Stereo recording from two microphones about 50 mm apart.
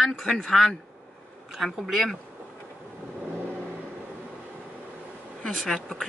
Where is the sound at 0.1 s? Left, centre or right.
Centre.